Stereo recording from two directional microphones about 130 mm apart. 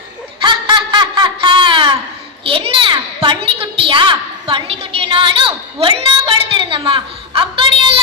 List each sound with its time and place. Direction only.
0.4 s snicker: 35° right (ahead or behind)
2.4 s a child's voice: 45° right (ahead or behind)